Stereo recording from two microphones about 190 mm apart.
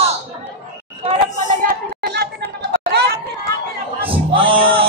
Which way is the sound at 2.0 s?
55° right (ahead or behind).